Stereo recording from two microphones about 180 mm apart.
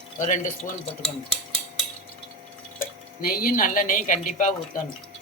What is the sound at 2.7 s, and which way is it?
Speech, 50° left (ahead or behind).